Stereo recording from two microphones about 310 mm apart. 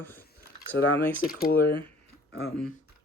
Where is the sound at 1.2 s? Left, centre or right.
Left.